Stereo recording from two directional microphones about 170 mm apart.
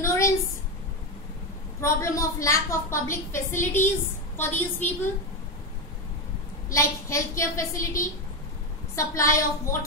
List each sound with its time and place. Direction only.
0.0 s a sound: 15° left (ahead or behind)
1.8 s a woman's voice: 15° left (ahead or behind)
6.7 s a woman's voice: 15° left (ahead or behind)
8.9 s a woman's voice: 20° left (ahead or behind)